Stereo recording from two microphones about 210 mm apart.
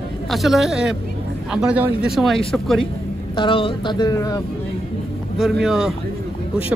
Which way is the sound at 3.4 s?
25° left (ahead or behind).